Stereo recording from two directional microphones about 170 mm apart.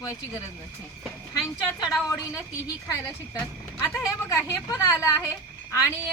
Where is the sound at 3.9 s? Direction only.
15° left (ahead or behind).